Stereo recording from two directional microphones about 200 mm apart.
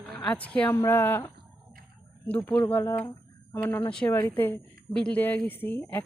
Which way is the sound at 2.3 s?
10° left (ahead or behind).